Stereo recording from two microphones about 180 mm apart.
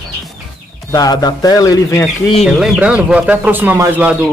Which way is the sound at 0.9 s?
20° left (ahead or behind).